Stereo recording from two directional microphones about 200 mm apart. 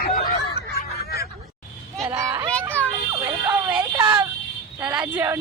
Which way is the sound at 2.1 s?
15° right (ahead or behind).